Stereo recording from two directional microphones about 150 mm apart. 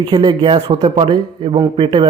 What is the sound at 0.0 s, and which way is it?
Speech, 35° right (ahead or behind).